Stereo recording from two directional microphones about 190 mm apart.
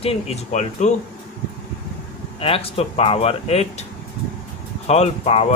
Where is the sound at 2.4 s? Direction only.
30° left (ahead or behind).